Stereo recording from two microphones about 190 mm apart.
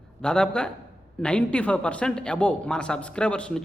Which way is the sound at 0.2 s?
5° left (ahead or behind).